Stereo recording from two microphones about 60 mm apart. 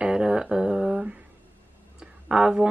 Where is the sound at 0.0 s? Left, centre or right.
Centre.